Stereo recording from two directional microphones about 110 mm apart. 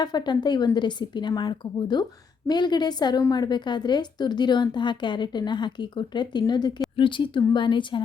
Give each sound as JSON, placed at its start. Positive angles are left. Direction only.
{"t": 0.0, "sound": "a woman's voice", "side_deg": 40}